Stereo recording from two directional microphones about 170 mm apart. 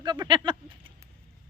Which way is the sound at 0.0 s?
25° right (ahead or behind).